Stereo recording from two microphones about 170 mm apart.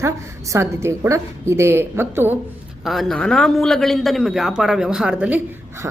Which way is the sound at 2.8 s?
Centre (ahead or behind).